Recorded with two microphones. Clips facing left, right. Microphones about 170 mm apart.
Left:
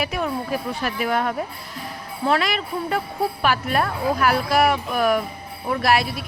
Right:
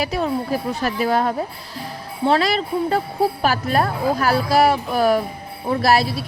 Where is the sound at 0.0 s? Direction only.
35° right (ahead or behind).